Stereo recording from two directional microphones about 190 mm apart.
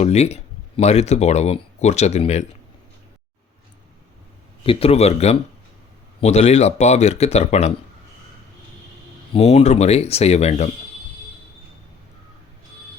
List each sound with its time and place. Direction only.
0.0 s speech: 35° left (ahead or behind)
4.6 s speech: 30° left (ahead or behind)
9.3 s speech: 35° left (ahead or behind)